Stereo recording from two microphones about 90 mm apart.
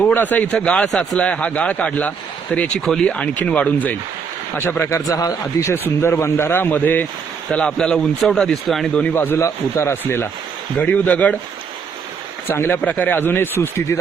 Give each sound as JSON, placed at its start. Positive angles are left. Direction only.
{"t": 0.0, "sound": "speech", "side_deg": 20}
{"t": 7.5, "sound": "speech", "side_deg": 10}
{"t": 9.1, "sound": "speech", "side_deg": 25}
{"t": 10.8, "sound": "speech", "side_deg": 15}
{"t": 12.5, "sound": "speech", "side_deg": 25}